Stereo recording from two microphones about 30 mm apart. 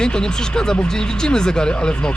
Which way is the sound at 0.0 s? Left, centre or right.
Left.